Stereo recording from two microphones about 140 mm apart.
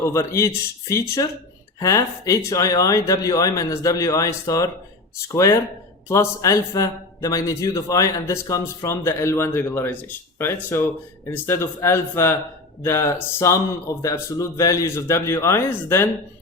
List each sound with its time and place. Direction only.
0.0 s a man's voice: 20° left (ahead or behind)